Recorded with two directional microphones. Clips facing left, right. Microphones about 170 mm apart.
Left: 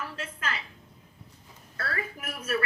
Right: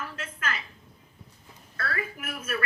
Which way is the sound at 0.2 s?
30° left (ahead or behind).